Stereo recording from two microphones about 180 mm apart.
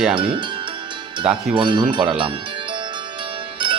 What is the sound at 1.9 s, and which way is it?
Speech, 5° right (ahead or behind).